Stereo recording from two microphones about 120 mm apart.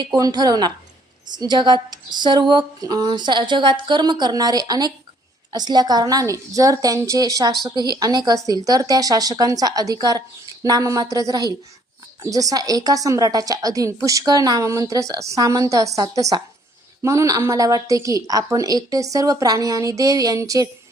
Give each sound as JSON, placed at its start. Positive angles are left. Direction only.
{"t": 0.0, "sound": "a woman's voice", "side_deg": -30}